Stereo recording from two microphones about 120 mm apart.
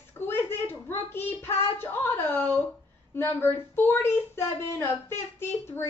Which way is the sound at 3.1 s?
20° left (ahead or behind).